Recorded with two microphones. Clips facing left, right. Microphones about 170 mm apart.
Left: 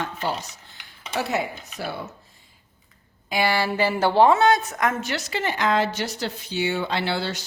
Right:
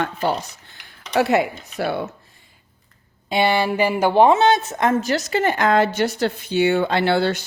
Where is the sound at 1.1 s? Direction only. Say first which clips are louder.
Right 8 dB; 65° right (ahead or behind).